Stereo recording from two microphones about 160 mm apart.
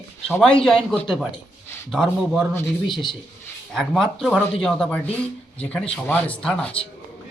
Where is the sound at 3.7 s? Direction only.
Centre (ahead or behind).